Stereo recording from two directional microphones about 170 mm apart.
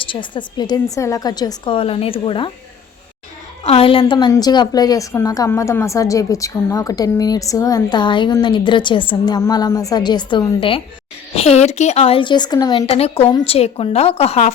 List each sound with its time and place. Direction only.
0.0 s a woman's voice: 30° left (ahead or behind)
3.6 s a woman's voice: 35° left (ahead or behind)
4.0 s a woman's voice: 25° left (ahead or behind)
12.8 s a woman's voice: 35° left (ahead or behind)